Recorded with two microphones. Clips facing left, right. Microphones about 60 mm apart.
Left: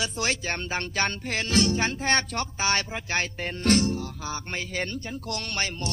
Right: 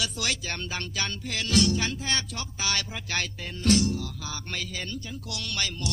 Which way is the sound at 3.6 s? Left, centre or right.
Left.